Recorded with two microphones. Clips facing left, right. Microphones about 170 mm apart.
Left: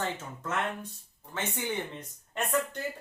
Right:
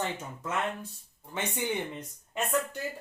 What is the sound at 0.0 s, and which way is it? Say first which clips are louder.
Speech: even; 10° right (ahead or behind).